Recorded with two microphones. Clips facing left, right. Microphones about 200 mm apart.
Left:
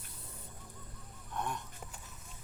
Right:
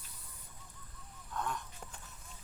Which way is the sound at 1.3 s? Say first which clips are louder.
Even; 20° left (ahead or behind).